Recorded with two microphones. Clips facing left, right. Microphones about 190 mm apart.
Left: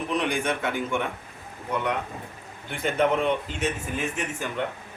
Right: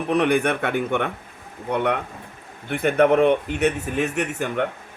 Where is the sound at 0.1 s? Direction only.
60° right (ahead or behind).